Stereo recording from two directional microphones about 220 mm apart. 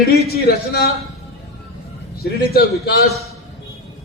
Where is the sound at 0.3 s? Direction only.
45° left (ahead or behind).